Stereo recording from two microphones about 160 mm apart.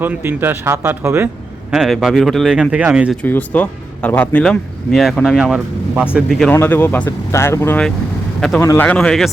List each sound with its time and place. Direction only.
0.0 s speech: 10° right (ahead or behind)
1.7 s speech: 5° right (ahead or behind)
3.2 s speech: 10° left (ahead or behind)
6.5 s speech: 10° left (ahead or behind)
8.4 s a man's voice: 5° left (ahead or behind)
8.6 s speech: 20° left (ahead or behind)
8.9 s speech: 5° left (ahead or behind)